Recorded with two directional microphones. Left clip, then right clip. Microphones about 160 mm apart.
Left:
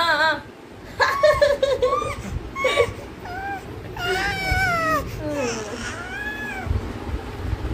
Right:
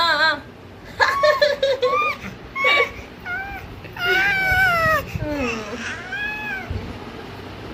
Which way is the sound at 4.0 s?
30° left (ahead or behind).